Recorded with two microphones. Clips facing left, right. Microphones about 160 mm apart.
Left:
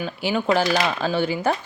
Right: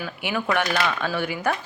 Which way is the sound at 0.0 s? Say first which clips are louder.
Left 4 dB; 25° left (ahead or behind).